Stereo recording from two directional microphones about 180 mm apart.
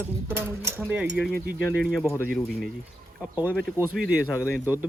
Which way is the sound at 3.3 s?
10° right (ahead or behind).